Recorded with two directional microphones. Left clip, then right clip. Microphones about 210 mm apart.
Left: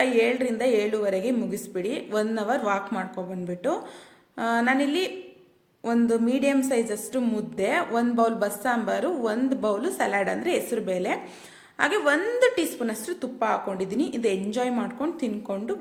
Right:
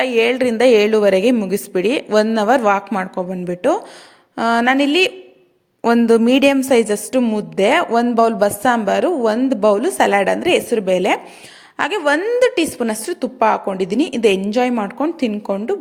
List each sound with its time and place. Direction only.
0.0 s a woman's voice: 45° right (ahead or behind)